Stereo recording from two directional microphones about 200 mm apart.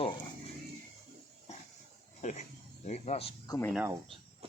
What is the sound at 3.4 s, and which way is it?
Speech, 15° left (ahead or behind).